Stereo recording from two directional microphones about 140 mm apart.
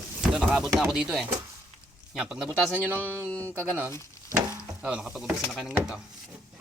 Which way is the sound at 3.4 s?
10° left (ahead or behind).